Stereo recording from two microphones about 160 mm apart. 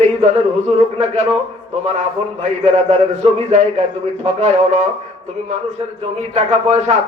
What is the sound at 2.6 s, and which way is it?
Speech, 45° right (ahead or behind).